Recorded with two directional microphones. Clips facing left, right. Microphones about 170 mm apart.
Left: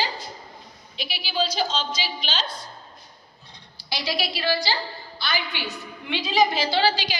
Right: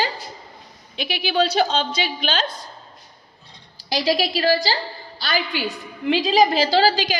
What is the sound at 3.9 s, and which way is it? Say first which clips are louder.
A woman's voice: right 8 dB; 40° right (ahead or behind).